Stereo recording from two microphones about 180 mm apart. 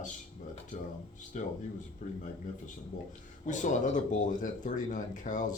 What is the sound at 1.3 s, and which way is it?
Speech, 45° left (ahead or behind).